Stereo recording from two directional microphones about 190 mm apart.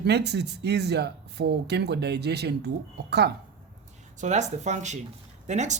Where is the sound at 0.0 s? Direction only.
60° right (ahead or behind).